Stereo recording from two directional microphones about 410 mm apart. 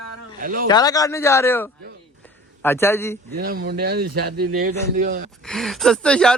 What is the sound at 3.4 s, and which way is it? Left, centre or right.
Speech, right.